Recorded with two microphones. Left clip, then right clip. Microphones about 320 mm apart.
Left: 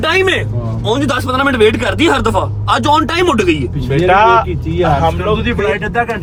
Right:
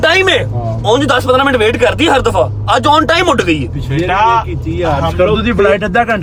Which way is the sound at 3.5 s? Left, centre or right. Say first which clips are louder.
Even; left.